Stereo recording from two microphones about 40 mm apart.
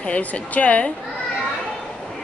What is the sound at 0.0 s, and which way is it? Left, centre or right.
Speech, left.